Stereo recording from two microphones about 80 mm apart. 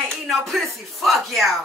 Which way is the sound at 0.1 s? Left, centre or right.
Centre.